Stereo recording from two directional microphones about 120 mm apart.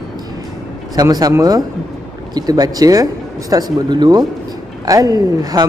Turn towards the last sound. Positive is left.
turn(degrees=-35)  # may be behind; listen again after turning